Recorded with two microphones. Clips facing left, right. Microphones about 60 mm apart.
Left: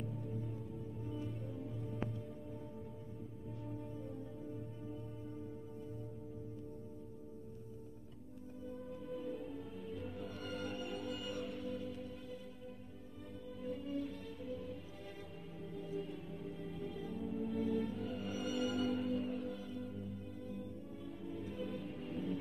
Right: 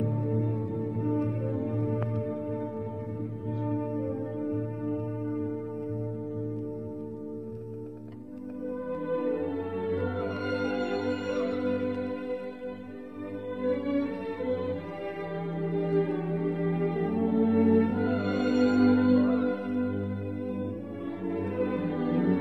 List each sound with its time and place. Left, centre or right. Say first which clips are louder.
0.0 s music: right 15 dB; right
3.6 s music: right 17 dB; right
9.0 s music: right 15 dB; right
13.6 s music: right 14 dB; right
15.5 s music: right 16 dB; right